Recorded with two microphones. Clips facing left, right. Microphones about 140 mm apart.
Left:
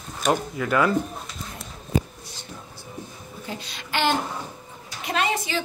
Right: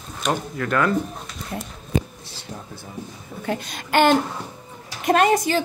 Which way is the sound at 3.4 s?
55° right (ahead or behind).